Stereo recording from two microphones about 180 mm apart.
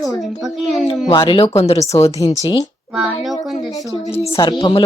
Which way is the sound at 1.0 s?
30° left (ahead or behind).